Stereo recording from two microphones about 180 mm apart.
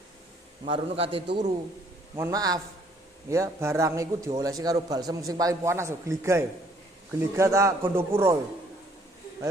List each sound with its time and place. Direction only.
0.7 s a man's voice: 30° right (ahead or behind)
2.1 s a man's voice: 15° right (ahead or behind)